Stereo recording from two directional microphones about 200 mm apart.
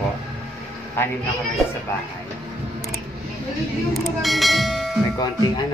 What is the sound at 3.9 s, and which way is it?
Speech, centre (ahead or behind).